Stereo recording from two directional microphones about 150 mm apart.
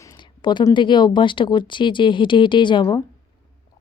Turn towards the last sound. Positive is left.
turn(degrees=25)  # may be behind; listen again after turning